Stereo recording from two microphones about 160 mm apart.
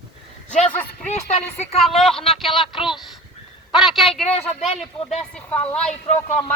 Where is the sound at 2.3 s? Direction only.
Centre (ahead or behind).